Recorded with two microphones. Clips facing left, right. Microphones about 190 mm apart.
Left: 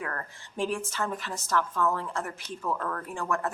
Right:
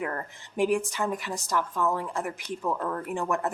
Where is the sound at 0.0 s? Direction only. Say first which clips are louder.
Right 4 dB; 20° right (ahead or behind).